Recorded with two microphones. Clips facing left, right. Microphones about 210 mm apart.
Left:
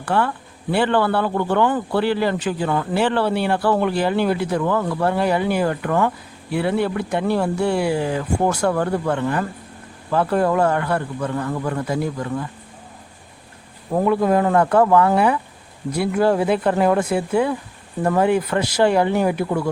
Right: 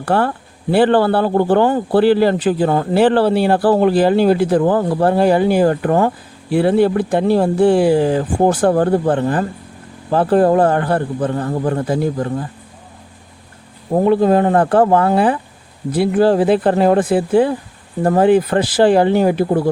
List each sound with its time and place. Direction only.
0.0 s a man's voice: 35° right (ahead or behind)
13.9 s a man's voice: 30° right (ahead or behind)